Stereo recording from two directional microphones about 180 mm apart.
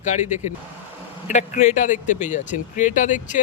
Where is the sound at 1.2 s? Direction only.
40° left (ahead or behind).